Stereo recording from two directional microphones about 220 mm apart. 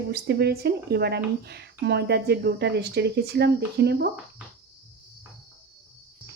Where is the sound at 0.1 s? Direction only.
45° right (ahead or behind).